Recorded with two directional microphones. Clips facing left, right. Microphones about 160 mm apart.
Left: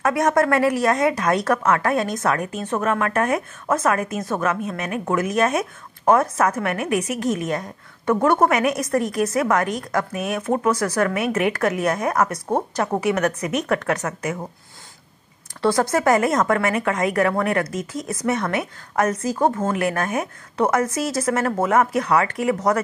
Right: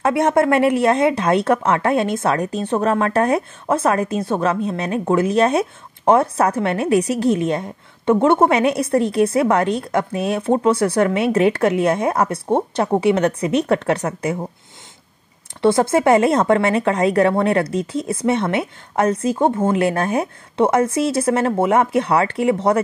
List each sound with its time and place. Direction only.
0.0 s speech: 30° right (ahead or behind)
15.6 s speech: 25° right (ahead or behind)